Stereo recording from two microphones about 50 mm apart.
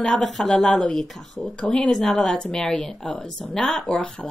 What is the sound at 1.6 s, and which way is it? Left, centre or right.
A woman's voice, centre.